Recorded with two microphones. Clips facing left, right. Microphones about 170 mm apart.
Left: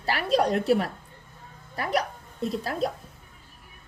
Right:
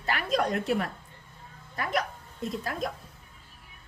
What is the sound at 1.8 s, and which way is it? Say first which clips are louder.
Music: left 3 dB; 35° left (ahead or behind).